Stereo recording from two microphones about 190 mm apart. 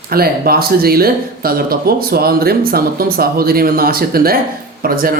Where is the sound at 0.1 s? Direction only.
55° right (ahead or behind).